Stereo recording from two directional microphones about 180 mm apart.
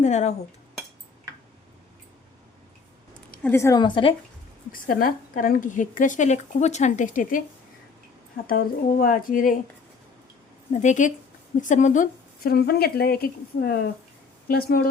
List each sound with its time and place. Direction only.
0.0 s cutlery: 40° left (ahead or behind)
3.3 s a woman's voice: 10° left (ahead or behind); by 4.1 s 25° left (ahead or behind)
4.7 s a woman's voice: 50° left (ahead or behind)
8.4 s a woman's voice: 55° left (ahead or behind)
10.7 s a woman's voice: 40° left (ahead or behind)
12.4 s speech: 60° left (ahead or behind)